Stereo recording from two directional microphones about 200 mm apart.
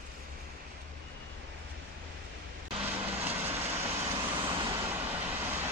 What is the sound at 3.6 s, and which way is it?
Vehicle, 30° right (ahead or behind).